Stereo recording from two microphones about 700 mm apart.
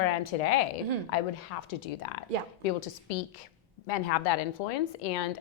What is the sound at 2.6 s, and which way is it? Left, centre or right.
A woman's voice, left.